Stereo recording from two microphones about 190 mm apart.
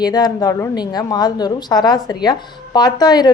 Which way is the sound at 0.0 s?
20° left (ahead or behind).